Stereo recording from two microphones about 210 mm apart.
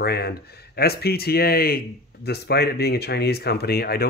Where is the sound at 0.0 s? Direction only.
50° left (ahead or behind).